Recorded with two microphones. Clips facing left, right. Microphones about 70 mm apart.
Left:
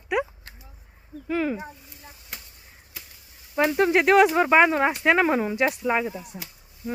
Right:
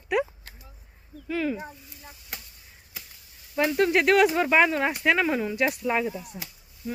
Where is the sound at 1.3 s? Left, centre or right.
Left.